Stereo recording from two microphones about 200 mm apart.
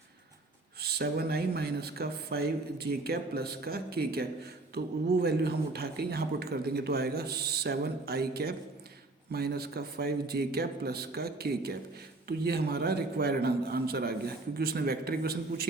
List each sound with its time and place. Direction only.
0.8 s speech: 50° right (ahead or behind)